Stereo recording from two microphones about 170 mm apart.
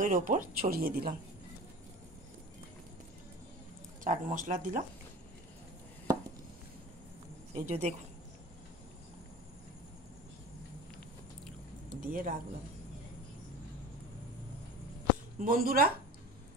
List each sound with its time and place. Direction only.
0.0 s speech: 50° right (ahead or behind)
4.0 s speech: 50° right (ahead or behind)
7.5 s speech: 40° right (ahead or behind)
11.9 s speech: 55° right (ahead or behind)
15.3 s speech: 55° right (ahead or behind)